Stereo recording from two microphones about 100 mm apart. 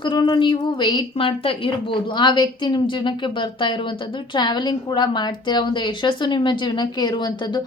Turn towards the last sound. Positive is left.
turn(degrees=45)  # may be behind; listen again after turning